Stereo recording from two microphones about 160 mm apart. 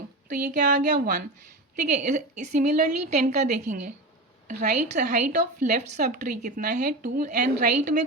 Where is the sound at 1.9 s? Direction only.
50° right (ahead or behind).